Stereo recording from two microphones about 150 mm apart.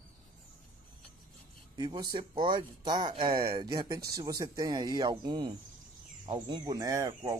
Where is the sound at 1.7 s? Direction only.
30° right (ahead or behind).